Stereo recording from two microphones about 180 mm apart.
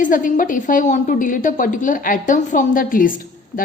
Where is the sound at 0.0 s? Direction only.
50° left (ahead or behind).